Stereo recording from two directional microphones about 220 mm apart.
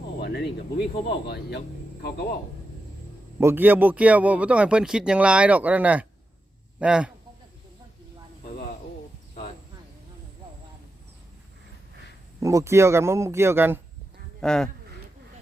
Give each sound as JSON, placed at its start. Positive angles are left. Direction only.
{"t": 0.2, "sound": "speech", "side_deg": 45}
{"t": 3.4, "sound": "a man's voice", "side_deg": -10}
{"t": 12.4, "sound": "speech", "side_deg": -15}
{"t": 14.4, "sound": "speech", "side_deg": 5}